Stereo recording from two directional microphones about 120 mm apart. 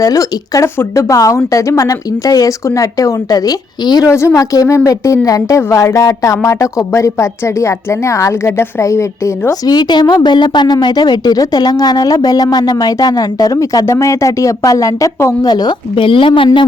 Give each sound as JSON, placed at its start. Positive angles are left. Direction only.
{"t": 0.0, "sound": "a woman's voice", "side_deg": 30}